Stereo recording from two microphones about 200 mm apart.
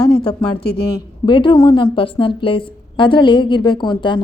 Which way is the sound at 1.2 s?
25° left (ahead or behind).